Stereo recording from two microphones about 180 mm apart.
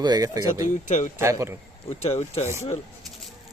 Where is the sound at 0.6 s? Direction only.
45° left (ahead or behind).